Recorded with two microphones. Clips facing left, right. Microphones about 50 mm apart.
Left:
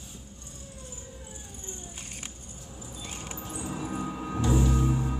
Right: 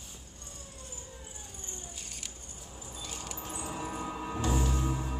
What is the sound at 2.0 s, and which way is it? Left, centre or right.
Music, left.